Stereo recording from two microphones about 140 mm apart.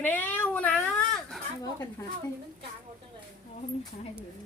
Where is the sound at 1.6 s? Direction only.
25° left (ahead or behind).